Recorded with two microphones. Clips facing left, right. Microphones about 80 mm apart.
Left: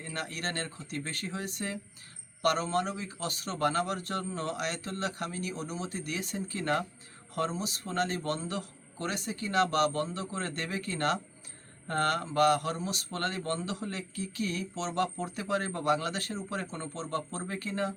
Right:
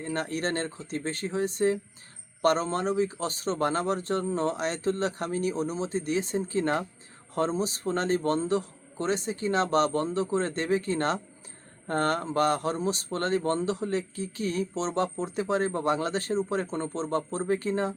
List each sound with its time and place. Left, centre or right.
0.0 s speech: right